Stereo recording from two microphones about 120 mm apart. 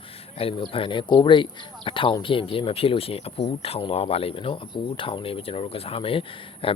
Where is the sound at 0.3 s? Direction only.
50° left (ahead or behind).